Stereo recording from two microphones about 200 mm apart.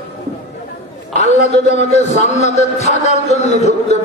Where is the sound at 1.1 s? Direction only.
35° left (ahead or behind).